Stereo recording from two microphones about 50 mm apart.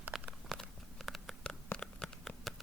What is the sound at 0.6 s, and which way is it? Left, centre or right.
Patter, centre.